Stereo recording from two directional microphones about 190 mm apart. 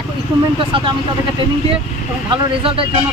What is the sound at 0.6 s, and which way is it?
Speech, 25° right (ahead or behind).